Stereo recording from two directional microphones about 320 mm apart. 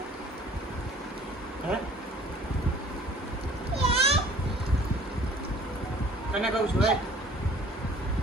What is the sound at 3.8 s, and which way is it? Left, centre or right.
Children playing, centre.